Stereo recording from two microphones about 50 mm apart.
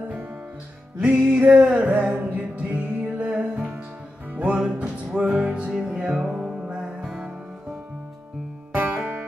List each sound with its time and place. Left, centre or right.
0.9 s music: right
8.7 s music: right